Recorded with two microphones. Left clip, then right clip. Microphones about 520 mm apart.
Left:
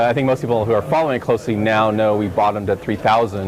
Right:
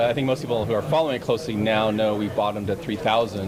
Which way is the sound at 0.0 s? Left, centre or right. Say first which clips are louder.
Left 5 dB; left.